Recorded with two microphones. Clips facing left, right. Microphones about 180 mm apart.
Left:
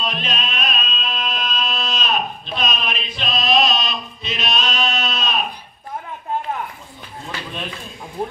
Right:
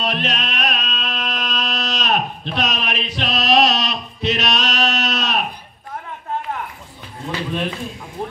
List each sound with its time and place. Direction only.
0.0 s music: 70° right (ahead or behind)
8.2 s music: 15° left (ahead or behind)